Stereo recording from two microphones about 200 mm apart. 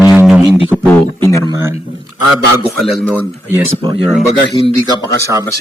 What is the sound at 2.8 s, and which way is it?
Speech, centre (ahead or behind).